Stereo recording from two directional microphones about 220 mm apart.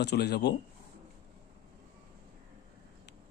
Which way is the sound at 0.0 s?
50° left (ahead or behind).